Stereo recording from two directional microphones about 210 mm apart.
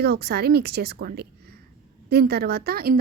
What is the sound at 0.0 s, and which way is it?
A woman's voice, 50° right (ahead or behind).